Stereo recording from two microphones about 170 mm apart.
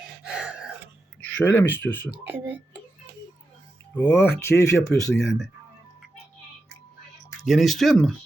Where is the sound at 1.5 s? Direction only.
10° left (ahead or behind).